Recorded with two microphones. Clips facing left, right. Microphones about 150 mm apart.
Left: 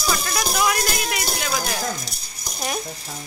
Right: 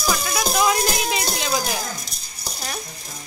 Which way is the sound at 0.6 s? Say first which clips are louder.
Right 3 dB; 20° right (ahead or behind).